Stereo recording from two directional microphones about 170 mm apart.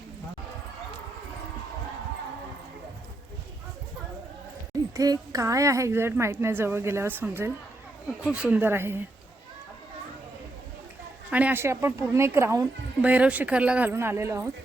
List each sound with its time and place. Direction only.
4.7 s speech: 20° right (ahead or behind)
11.3 s speech: 10° right (ahead or behind)